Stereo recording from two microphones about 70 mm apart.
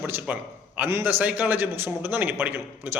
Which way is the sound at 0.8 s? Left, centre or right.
Right.